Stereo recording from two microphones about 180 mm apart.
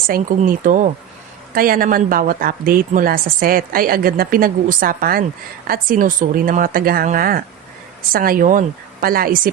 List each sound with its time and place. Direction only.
0.1 s a woman's voice: 50° right (ahead or behind)